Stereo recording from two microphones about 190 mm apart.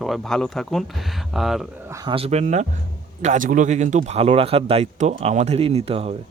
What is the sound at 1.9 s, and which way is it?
Speech, 20° right (ahead or behind).